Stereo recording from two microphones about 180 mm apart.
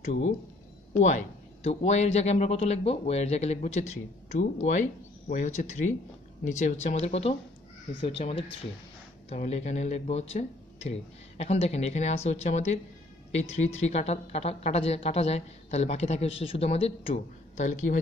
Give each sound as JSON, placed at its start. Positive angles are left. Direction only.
{"t": 0.9, "sound": "speech", "side_deg": 45}